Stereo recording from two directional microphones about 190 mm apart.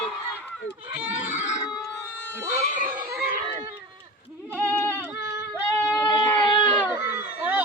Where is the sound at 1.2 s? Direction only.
40° left (ahead or behind).